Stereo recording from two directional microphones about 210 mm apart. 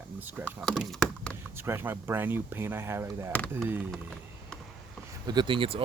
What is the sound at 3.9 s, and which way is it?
Vehicle, centre (ahead or behind).